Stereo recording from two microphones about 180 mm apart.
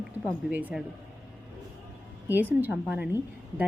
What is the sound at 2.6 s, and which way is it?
Speech, 10° right (ahead or behind).